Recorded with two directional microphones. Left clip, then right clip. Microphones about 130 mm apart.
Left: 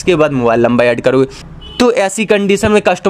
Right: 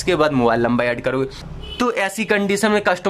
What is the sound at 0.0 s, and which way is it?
Speech, 20° left (ahead or behind).